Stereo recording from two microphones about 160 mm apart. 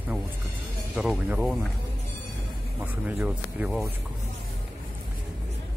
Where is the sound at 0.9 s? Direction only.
Centre (ahead or behind).